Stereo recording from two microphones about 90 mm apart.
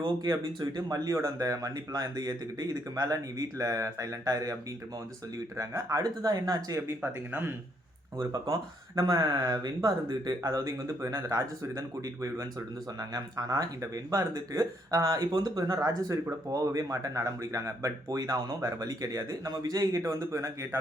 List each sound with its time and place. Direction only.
0.3 s speech: 40° right (ahead or behind)
5.5 s speech: 40° right (ahead or behind)
6.7 s speech: 25° right (ahead or behind)
8.2 s speech: 40° right (ahead or behind)